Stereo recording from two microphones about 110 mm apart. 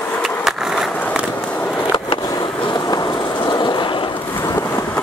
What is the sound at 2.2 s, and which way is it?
Vehicle, 40° left (ahead or behind).